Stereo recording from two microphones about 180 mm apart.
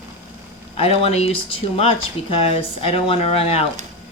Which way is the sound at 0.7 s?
35° left (ahead or behind).